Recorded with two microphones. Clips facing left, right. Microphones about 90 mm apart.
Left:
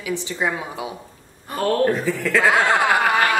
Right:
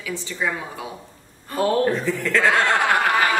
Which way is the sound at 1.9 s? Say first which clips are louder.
Left 1 dB; 5° left (ahead or behind).